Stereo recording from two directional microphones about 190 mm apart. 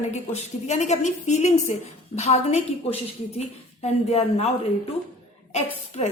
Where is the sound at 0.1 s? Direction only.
35° left (ahead or behind).